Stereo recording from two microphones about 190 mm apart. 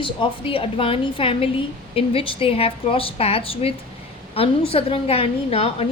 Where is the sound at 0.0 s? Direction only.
25° left (ahead or behind).